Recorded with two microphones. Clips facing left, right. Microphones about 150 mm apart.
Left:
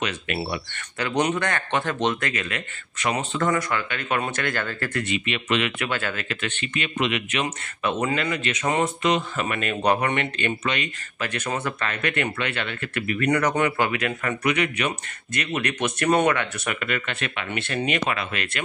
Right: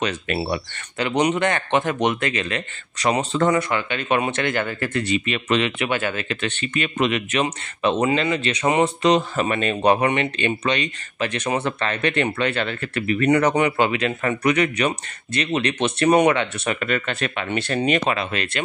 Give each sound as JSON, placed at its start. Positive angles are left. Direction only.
{"t": 0.4, "sound": "speech", "side_deg": -25}
{"t": 3.4, "sound": "speech", "side_deg": -25}
{"t": 5.0, "sound": "speech", "side_deg": -40}
{"t": 5.8, "sound": "speech", "side_deg": -20}
{"t": 6.4, "sound": "speech", "side_deg": -35}
{"t": 7.8, "sound": "speech", "side_deg": -25}
{"t": 10.6, "sound": "speech", "side_deg": -30}
{"t": 11.2, "sound": "speech", "side_deg": -15}
{"t": 11.6, "sound": "speech", "side_deg": -30}
{"t": 14.4, "sound": "speech", "side_deg": -40}